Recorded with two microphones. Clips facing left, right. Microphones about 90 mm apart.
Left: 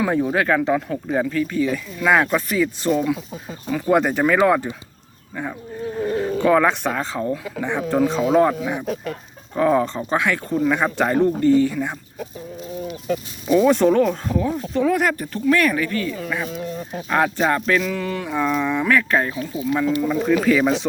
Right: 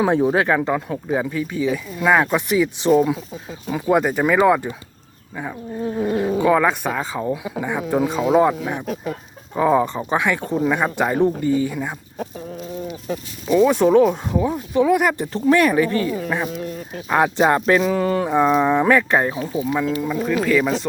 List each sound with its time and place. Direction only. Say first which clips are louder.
0.0 s speech: right 3 dB; 25° right (ahead or behind)
1.0 s speech: left 1 dB; 10° right (ahead or behind)
13.7 s speech: right 2 dB; 10° right (ahead or behind)
15.3 s speech: right 3 dB; 25° right (ahead or behind)
17.1 s speech: right 3 dB; 15° right (ahead or behind)
19.7 s speech: left 4 dB; 10° right (ahead or behind)